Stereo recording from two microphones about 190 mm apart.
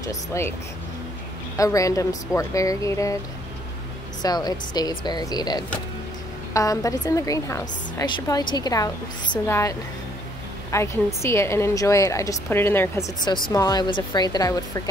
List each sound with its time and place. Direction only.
0.0 s a woman's voice: 15° left (ahead or behind)
1.6 s a woman's voice: 15° left (ahead or behind)
4.2 s a woman's voice: 20° left (ahead or behind)